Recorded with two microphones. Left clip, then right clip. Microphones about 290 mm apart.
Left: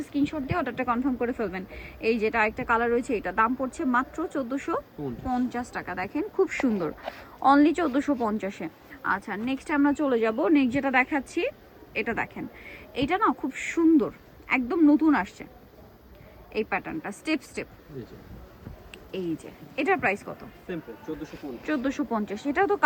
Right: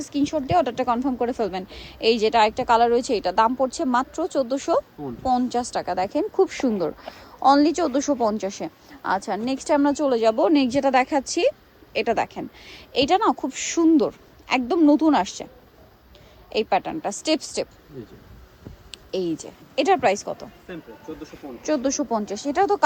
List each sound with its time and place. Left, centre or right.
0.0 s a woman's voice: right
16.5 s a woman's voice: right
19.7 s a woman's voice: right
21.6 s a woman's voice: centre